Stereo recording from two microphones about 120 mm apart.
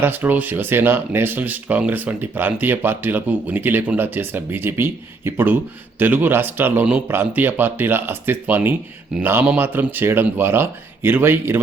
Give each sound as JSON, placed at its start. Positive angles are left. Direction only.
{"t": 0.0, "sound": "speech", "side_deg": -15}